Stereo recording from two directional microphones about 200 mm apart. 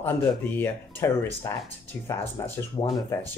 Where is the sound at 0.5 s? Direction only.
10° left (ahead or behind).